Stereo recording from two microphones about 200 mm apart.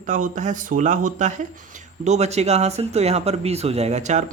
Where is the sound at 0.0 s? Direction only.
40° right (ahead or behind).